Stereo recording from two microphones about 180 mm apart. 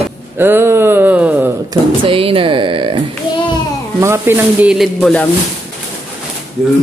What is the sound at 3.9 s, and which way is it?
Speech, 15° right (ahead or behind).